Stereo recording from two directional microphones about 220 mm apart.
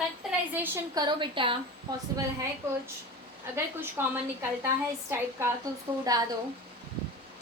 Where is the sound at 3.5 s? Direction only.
10° right (ahead or behind).